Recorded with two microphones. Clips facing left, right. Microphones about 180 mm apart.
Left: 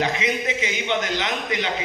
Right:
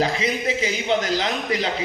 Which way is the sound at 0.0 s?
35° right (ahead or behind).